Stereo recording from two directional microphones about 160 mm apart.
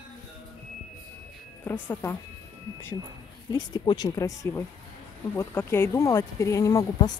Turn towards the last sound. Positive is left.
turn(degrees=20)  # may be behind; listen again after turning